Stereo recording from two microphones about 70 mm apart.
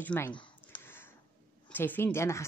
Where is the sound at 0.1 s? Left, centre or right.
Left.